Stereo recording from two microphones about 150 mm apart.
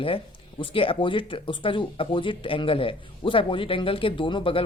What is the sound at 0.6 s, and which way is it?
Speech, 35° left (ahead or behind).